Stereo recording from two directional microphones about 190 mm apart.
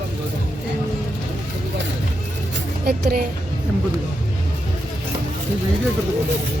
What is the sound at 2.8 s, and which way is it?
Speech, 55° right (ahead or behind).